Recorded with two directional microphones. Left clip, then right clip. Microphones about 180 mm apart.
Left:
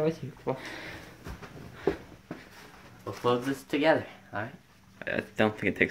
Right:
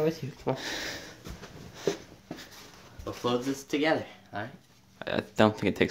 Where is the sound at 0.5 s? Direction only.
60° right (ahead or behind).